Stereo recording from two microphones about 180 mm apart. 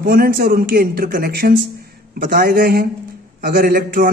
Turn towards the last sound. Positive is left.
turn(degrees=-50)  # may be behind; listen again after turning